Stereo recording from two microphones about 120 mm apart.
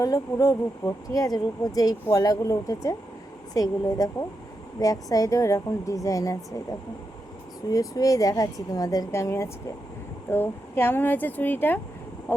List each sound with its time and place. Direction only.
0.0 s speech: 30° left (ahead or behind)
7.7 s speech: 30° left (ahead or behind)